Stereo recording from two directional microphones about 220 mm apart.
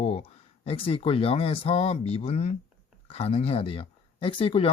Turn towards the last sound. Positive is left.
turn(degrees=25)  # may be behind; listen again after turning